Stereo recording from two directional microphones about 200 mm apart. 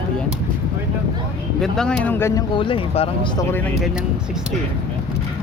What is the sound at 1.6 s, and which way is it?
Speech, 5° left (ahead or behind).